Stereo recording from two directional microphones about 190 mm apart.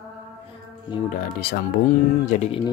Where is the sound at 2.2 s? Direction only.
40° left (ahead or behind).